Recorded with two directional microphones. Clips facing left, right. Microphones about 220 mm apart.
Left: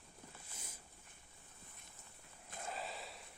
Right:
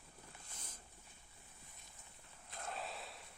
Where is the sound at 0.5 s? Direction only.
10° left (ahead or behind).